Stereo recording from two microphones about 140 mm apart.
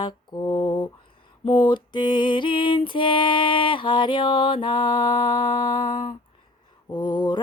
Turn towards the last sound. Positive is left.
turn(degrees=30)  # may be behind; listen again after turning